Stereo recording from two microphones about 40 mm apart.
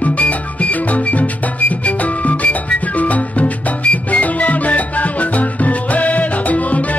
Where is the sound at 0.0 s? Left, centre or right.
Left.